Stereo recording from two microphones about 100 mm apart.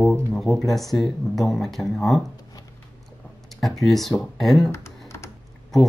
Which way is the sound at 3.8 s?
Centre (ahead or behind).